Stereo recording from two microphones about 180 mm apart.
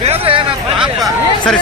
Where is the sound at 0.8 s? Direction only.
Centre (ahead or behind).